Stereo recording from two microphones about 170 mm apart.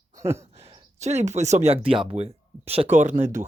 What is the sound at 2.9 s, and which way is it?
Speech, 45° right (ahead or behind).